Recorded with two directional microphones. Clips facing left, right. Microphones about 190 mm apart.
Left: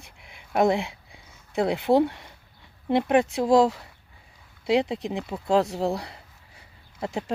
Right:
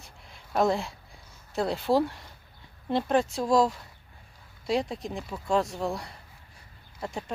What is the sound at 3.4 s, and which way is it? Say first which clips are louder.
Speech: left 4 dB; 25° left (ahead or behind).